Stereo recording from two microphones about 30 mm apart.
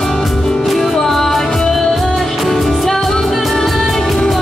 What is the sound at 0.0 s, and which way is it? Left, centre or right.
Music, centre.